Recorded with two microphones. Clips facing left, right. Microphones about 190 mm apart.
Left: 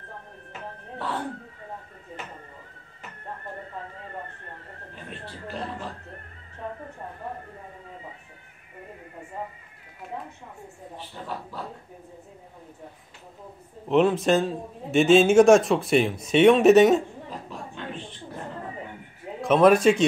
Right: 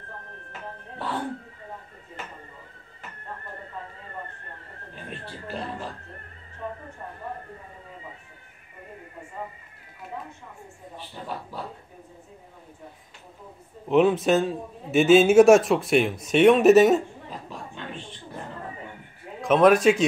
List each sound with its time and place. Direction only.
13.8 s a man's voice: centre (ahead or behind)
19.4 s a man's voice: centre (ahead or behind)